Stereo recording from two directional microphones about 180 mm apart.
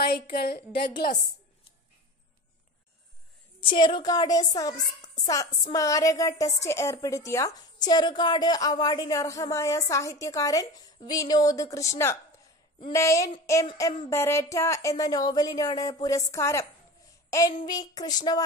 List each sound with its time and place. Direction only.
0.0 s a woman's voice: 60° left (ahead or behind)
3.6 s a woman's voice: 25° left (ahead or behind)
12.9 s a woman's voice: 15° left (ahead or behind)
17.6 s a woman's voice: 20° left (ahead or behind)